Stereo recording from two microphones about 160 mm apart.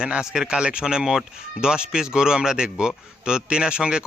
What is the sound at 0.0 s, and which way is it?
Speech, 5° right (ahead or behind).